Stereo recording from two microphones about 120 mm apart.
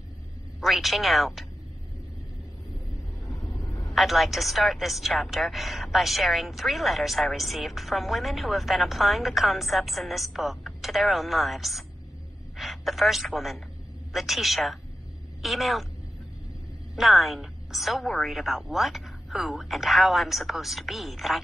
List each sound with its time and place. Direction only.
0.6 s a woman's voice: centre (ahead or behind)
3.3 s vehicle: 25° left (ahead or behind)
3.9 s a woman's voice: centre (ahead or behind)
16.9 s a woman's voice: centre (ahead or behind)